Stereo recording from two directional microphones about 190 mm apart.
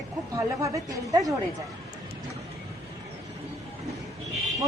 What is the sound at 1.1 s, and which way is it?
Speech, 20° right (ahead or behind).